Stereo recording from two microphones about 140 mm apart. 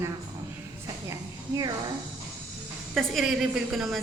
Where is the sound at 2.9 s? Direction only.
Centre (ahead or behind).